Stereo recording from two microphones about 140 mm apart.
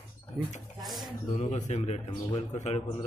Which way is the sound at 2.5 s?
55° left (ahead or behind).